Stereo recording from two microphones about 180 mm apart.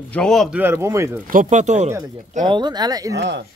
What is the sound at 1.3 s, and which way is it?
Speech, 45° right (ahead or behind).